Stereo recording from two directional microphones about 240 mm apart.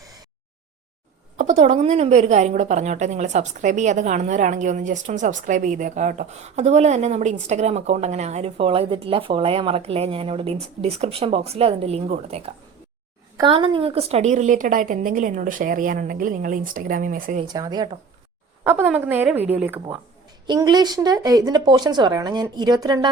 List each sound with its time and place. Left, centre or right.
1.4 s a woman's voice: right
17.5 s speech: centre